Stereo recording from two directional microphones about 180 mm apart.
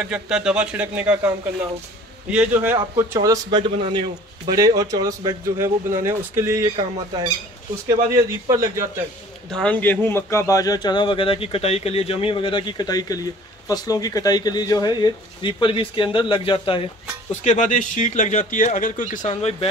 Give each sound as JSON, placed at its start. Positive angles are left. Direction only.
{"t": 0.0, "sound": "a man's voice", "side_deg": -5}
{"t": 2.3, "sound": "a man's voice", "side_deg": -10}
{"t": 9.5, "sound": "a man's voice", "side_deg": 5}
{"t": 17.3, "sound": "speech", "side_deg": 40}